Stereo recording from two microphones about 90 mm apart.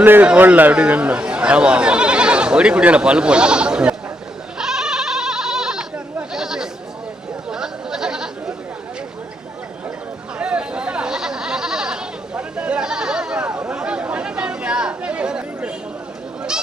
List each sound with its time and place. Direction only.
0.0 s a sound: 20° right (ahead or behind)
0.3 s speech: 20° right (ahead or behind)
4.5 s goat: 5° right (ahead or behind)
10.3 s goat: 10° right (ahead or behind)